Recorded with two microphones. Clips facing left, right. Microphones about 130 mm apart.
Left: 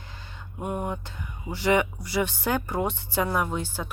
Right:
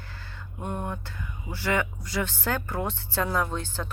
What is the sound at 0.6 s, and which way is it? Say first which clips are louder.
Speech: left 3 dB; 10° left (ahead or behind).